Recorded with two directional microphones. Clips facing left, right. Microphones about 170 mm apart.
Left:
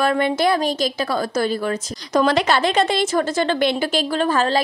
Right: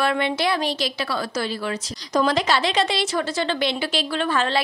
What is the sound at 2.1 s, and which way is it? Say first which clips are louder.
A woman's voice: left 3 dB; 65° left (ahead or behind).